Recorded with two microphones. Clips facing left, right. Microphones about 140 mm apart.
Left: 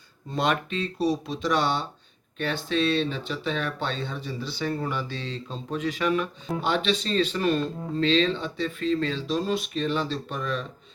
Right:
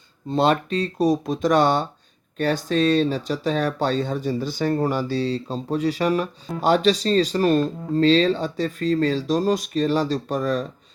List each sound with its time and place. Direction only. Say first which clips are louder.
0.3 s speech: right 6 dB; 30° right (ahead or behind)